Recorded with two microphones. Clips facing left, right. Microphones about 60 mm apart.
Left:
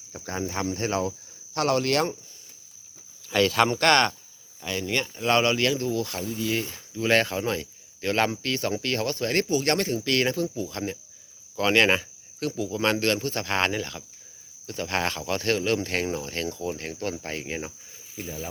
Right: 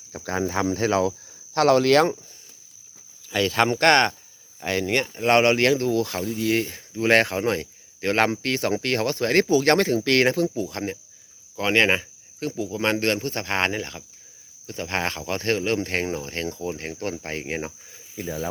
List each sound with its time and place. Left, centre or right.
0.1 s speech: right
3.3 s speech: centre
3.8 s speech: right
4.6 s speech: right
5.0 s speech: right
6.1 s speech: right
6.4 s speech: right
10.7 s speech: right
11.5 s speech: right
18.2 s speech: right